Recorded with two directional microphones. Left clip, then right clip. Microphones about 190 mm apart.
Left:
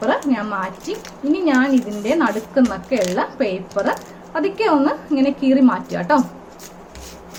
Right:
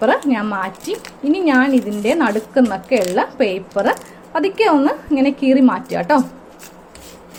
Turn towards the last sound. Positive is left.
turn(degrees=-30)  # may be behind; listen again after turning